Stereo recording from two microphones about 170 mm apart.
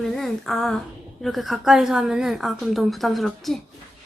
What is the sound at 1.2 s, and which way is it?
Speech, centre (ahead or behind).